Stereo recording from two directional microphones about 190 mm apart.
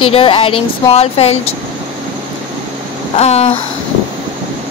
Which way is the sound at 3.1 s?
35° left (ahead or behind).